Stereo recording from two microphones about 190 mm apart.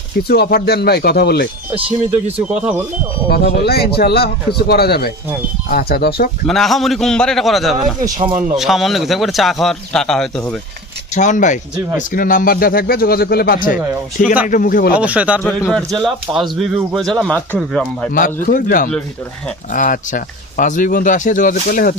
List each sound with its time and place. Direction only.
0.2 s speech: 55° left (ahead or behind)
2.0 s speech: 10° right (ahead or behind)
3.6 s speech: 55° left (ahead or behind)
6.5 s speech: centre (ahead or behind)
8.0 s speech: 30° right (ahead or behind)
8.5 s speech: centre (ahead or behind)
11.1 s speech: 40° left (ahead or behind)
14.9 s speech: 5° right (ahead or behind)
15.4 s speech: 5° left (ahead or behind)
18.3 s speech: 45° left (ahead or behind)